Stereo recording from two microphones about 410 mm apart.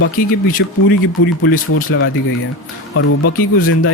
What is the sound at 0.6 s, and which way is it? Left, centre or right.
Speech, left.